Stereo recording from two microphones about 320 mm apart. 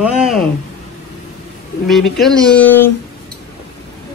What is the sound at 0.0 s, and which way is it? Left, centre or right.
Speech, centre.